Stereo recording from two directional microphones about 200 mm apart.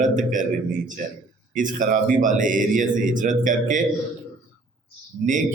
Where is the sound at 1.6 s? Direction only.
40° right (ahead or behind).